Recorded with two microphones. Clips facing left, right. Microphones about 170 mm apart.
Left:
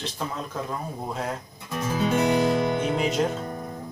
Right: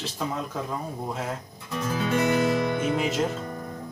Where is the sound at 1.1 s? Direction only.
Centre (ahead or behind).